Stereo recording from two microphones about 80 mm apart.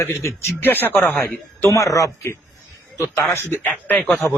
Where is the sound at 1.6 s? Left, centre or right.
Left.